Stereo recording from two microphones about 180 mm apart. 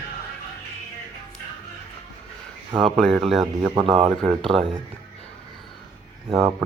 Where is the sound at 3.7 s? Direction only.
30° right (ahead or behind).